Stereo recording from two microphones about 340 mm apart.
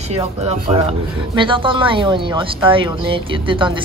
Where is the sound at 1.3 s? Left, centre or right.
Centre.